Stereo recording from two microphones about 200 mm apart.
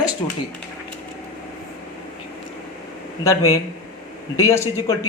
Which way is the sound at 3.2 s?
15° left (ahead or behind).